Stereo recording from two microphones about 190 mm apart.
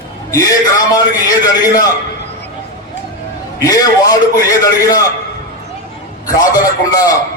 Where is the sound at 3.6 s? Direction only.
20° left (ahead or behind).